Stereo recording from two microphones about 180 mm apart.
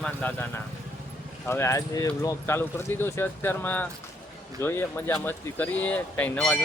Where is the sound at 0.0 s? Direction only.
10° left (ahead or behind).